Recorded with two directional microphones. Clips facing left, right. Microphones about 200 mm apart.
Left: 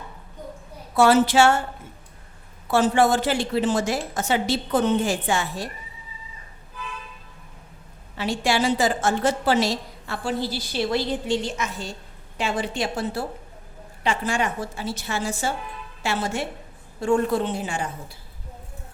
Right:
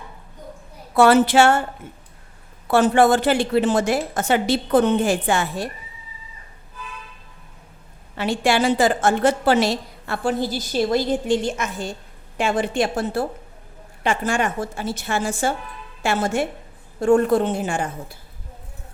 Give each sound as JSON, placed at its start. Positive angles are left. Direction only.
{"t": 0.9, "sound": "a woman's voice", "side_deg": -60}
{"t": 2.6, "sound": "a woman's voice", "side_deg": -60}
{"t": 8.1, "sound": "a woman's voice", "side_deg": -55}